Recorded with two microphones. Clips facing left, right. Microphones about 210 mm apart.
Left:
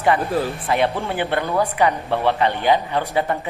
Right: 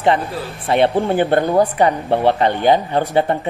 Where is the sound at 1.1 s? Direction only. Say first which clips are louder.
Right 7 dB; 45° right (ahead or behind).